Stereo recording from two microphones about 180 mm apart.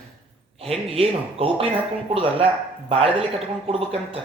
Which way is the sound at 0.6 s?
30° right (ahead or behind).